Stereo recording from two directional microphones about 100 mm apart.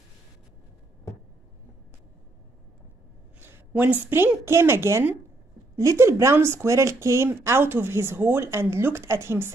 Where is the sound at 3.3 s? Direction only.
20° right (ahead or behind).